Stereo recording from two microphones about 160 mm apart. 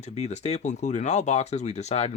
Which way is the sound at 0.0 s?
45° left (ahead or behind).